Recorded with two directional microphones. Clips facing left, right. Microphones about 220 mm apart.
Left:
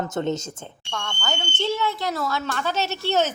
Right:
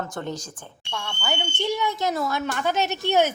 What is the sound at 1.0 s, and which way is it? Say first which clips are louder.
Speech: right 1 dB; 10° right (ahead or behind).